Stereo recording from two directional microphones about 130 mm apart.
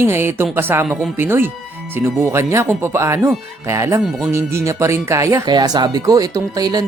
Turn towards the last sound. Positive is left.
turn(degrees=-30)  # may be behind; listen again after turning